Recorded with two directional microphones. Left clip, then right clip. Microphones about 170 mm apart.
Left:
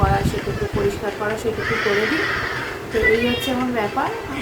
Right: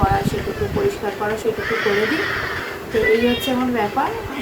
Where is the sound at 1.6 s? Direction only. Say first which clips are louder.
Even; 55° left (ahead or behind).